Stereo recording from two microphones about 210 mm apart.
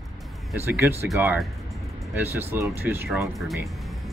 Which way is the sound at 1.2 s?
5° right (ahead or behind).